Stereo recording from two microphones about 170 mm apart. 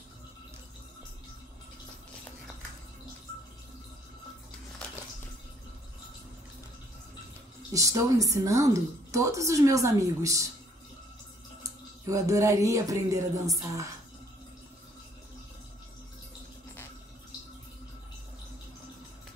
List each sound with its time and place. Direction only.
7.7 s a woman's voice: 20° right (ahead or behind)
12.1 s a woman's voice: 20° right (ahead or behind)